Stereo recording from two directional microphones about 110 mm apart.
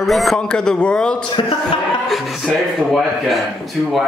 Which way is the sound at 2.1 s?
Centre (ahead or behind).